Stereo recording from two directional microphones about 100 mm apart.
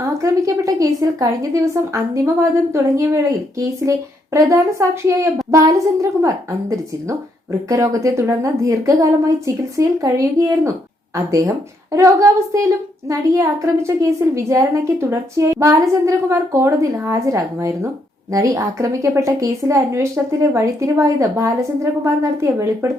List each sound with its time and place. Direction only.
0.0 s a woman's voice: 30° right (ahead or behind)